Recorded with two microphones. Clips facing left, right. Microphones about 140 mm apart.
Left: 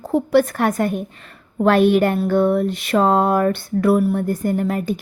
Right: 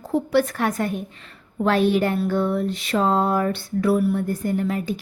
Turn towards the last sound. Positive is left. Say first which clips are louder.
# left 3 dB
turn(degrees=50)  # may be behind; listen again after turning